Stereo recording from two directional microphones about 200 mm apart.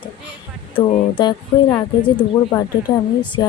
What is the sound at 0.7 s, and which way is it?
Speech, 25° left (ahead or behind).